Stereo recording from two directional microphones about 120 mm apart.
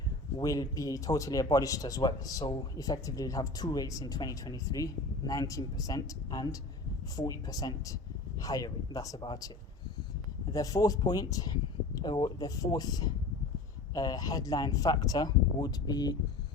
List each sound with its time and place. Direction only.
0.3 s speech: 30° left (ahead or behind)
10.5 s speech: 30° left (ahead or behind)